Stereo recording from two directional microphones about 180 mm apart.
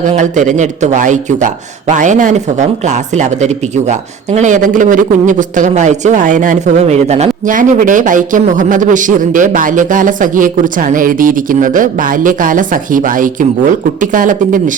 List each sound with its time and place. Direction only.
0.0 s speech: 45° right (ahead or behind)